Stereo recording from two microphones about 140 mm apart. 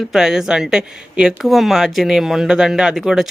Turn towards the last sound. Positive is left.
turn(degrees=-5)  # may be behind; listen again after turning